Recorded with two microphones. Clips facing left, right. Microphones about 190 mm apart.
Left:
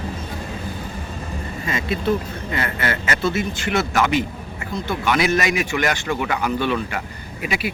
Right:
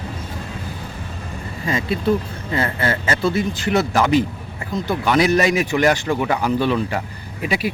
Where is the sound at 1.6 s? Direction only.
30° right (ahead or behind).